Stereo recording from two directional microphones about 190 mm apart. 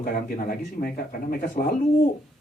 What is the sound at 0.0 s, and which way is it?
Speech, 50° left (ahead or behind).